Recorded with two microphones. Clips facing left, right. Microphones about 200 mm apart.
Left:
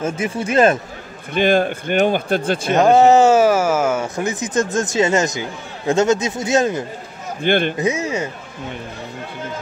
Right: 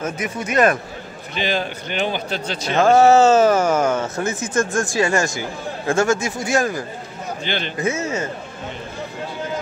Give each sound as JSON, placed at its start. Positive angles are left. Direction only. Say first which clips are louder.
{"t": 0.0, "sound": "speech", "louder": "left 4 dB", "side_deg": 30}
{"t": 1.3, "sound": "a man's voice", "louder": "left 8 dB", "side_deg": 50}
{"t": 2.7, "sound": "speech", "louder": "left 1 dB", "side_deg": 20}
{"t": 7.4, "sound": "a man's voice", "louder": "left 10 dB", "side_deg": 55}
{"t": 7.7, "sound": "speech", "louder": "left 2 dB", "side_deg": 15}